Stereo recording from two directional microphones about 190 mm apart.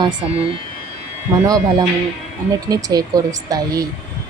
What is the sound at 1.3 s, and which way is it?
Speech, 20° right (ahead or behind).